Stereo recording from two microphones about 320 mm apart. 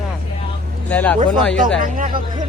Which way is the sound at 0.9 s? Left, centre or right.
Centre.